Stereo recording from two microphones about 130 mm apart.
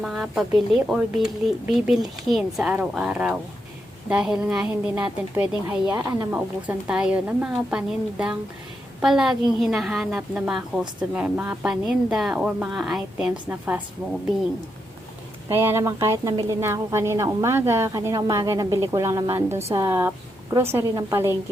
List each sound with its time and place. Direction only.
0.0 s a woman's voice: 5° right (ahead or behind)
15.4 s a woman's voice: 20° right (ahead or behind)